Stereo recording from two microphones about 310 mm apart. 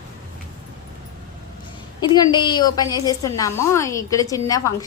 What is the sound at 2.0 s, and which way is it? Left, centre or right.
A woman's voice, centre.